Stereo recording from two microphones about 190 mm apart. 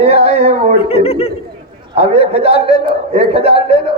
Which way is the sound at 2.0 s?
30° right (ahead or behind).